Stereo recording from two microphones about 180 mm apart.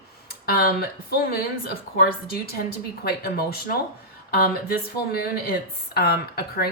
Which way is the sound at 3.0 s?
60° left (ahead or behind).